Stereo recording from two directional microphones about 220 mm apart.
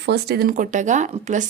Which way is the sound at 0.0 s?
50° right (ahead or behind).